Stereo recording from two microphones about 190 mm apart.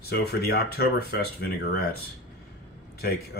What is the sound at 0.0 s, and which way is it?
Speech, 55° left (ahead or behind).